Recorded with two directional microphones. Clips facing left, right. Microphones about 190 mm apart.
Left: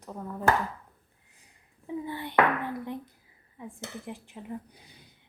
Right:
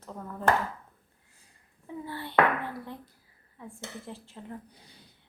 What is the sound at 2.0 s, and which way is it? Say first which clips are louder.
Speech: even; 15° left (ahead or behind).